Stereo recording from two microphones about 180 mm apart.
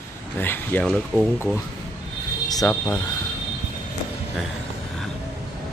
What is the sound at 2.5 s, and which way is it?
Speech, 15° left (ahead or behind).